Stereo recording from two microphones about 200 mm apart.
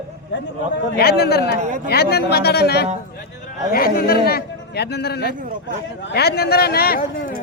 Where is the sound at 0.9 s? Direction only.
55° left (ahead or behind).